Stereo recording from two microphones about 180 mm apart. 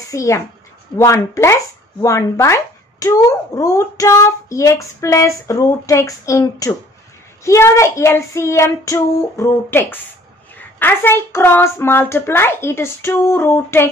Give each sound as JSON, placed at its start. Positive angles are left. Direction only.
{"t": 0.1, "sound": "a child's voice", "side_deg": 15}